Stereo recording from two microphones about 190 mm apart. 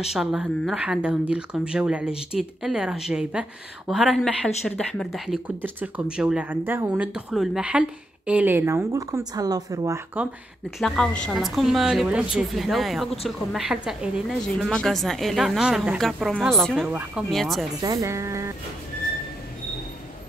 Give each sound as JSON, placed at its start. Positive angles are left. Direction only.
{"t": 0.1, "sound": "a woman's voice", "side_deg": 0}
{"t": 10.8, "sound": "a woman's voice", "side_deg": 0}
{"t": 17.8, "sound": "speech", "side_deg": -20}